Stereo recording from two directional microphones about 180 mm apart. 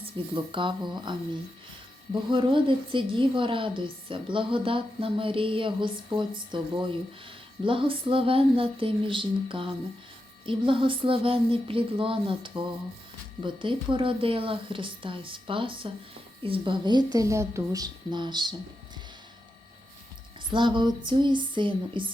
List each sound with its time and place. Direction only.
0.0 s a woman's voice: 30° right (ahead or behind)
2.3 s a woman's voice: 25° right (ahead or behind)
7.6 s a woman's voice: 30° right (ahead or behind)
20.5 s a woman's voice: 25° right (ahead or behind)